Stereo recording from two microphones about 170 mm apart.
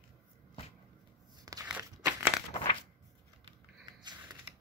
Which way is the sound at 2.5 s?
30° left (ahead or behind).